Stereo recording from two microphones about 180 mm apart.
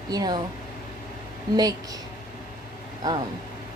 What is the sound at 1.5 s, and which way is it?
Speech, 20° right (ahead or behind).